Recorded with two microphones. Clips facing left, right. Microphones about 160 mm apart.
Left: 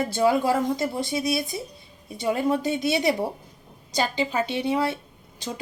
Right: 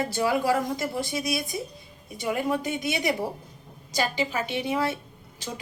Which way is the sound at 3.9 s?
20° left (ahead or behind).